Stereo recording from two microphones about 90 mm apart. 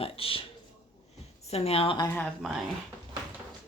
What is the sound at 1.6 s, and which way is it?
Speech, 85° left.